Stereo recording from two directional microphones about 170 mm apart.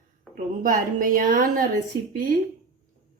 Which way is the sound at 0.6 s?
50° right (ahead or behind).